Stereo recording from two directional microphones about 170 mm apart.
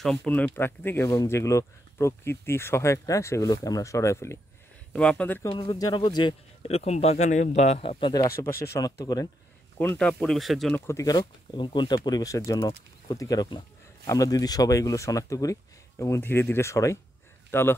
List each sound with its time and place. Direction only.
0.0 s speech: 5° left (ahead or behind)
5.5 s speech: 30° left (ahead or behind)
9.8 s speech: 10° left (ahead or behind)
10.7 s speech: 15° left (ahead or behind)